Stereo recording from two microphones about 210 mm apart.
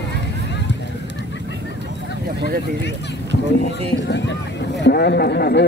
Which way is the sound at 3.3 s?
55° left (ahead or behind).